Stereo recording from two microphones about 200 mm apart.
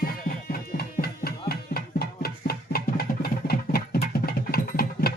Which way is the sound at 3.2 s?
50° left (ahead or behind).